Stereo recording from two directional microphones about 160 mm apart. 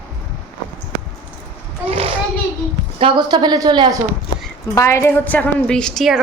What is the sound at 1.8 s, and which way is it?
A child's voice, 40° right (ahead or behind).